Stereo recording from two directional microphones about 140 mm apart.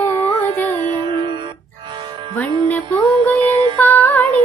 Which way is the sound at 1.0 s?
35° right (ahead or behind).